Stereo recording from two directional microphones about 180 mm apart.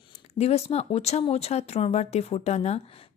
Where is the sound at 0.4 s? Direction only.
35° left (ahead or behind).